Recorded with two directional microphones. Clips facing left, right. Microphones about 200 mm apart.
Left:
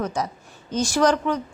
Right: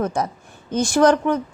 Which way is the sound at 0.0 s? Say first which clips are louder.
Right 4 dB; 55° right (ahead or behind).